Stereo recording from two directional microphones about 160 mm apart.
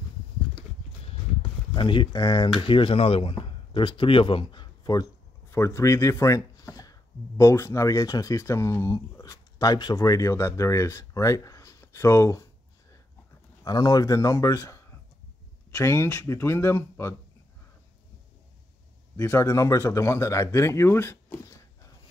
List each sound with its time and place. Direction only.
1.8 s speech: 30° left (ahead or behind)
13.7 s speech: 25° left (ahead or behind)
19.1 s speech: 15° left (ahead or behind)